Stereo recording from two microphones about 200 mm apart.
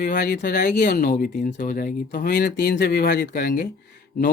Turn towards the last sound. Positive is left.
turn(degrees=50)  # may be behind; listen again after turning